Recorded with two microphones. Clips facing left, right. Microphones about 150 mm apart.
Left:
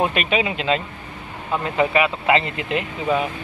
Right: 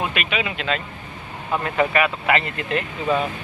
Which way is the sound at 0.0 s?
35° left (ahead or behind).